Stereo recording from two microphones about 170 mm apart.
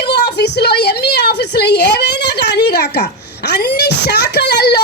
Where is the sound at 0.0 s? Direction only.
80° left.